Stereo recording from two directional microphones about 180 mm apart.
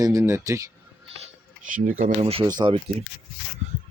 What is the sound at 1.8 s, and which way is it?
Speech, 50° right (ahead or behind).